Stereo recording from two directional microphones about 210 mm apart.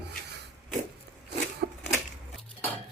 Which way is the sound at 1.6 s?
50° right (ahead or behind).